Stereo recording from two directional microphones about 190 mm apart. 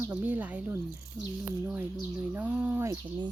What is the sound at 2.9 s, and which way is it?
Speech, 25° right (ahead or behind).